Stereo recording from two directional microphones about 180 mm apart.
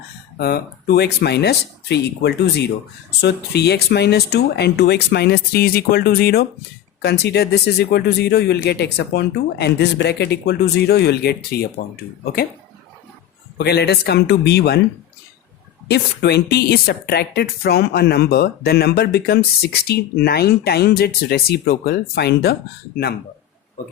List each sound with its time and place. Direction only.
0.3 s speech: 60° left (ahead or behind)
13.6 s speech: 65° left (ahead or behind)
15.9 s speech: 65° left (ahead or behind)